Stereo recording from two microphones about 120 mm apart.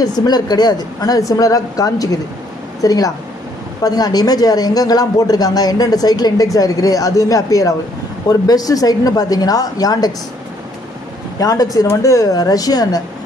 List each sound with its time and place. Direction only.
0.0 s speech: 35° left (ahead or behind)
11.3 s speech: 30° left (ahead or behind)